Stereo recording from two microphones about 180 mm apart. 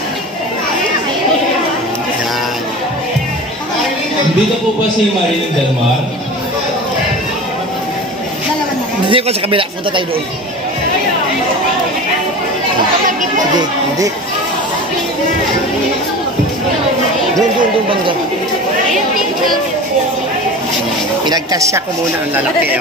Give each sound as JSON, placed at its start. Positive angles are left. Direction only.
{"t": 9.1, "sound": "speech", "side_deg": -30}
{"t": 13.6, "sound": "speech", "side_deg": -20}
{"t": 21.3, "sound": "a woman's voice", "side_deg": -20}